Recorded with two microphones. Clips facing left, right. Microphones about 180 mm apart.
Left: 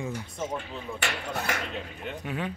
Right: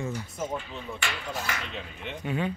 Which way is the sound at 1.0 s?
55° left (ahead or behind).